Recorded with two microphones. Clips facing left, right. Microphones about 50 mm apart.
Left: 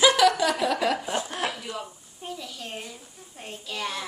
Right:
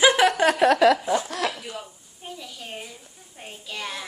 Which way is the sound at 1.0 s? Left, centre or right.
Right.